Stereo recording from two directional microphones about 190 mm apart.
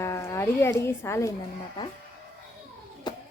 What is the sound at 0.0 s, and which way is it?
A woman's voice, 15° left (ahead or behind).